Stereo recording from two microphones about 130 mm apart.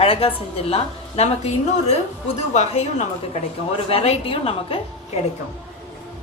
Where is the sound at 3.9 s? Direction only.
45° left (ahead or behind).